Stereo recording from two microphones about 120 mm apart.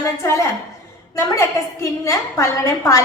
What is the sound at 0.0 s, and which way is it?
A woman's voice, 25° left (ahead or behind).